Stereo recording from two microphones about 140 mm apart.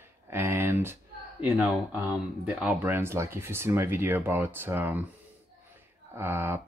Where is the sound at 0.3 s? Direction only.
15° right (ahead or behind).